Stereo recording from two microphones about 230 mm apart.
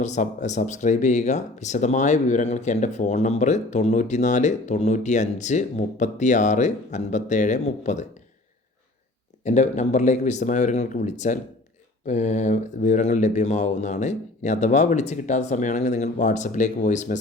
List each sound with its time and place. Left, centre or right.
0.0 s speech: left
9.4 s speech: left